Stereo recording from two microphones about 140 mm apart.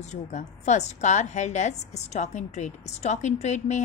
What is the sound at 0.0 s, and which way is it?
A woman's voice, 55° left (ahead or behind).